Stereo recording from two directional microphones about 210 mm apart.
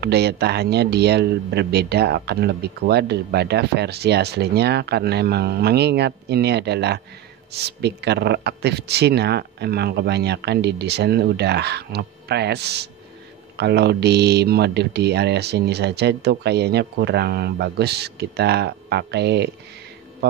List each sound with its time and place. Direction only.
0.0 s speech: 50° right (ahead or behind)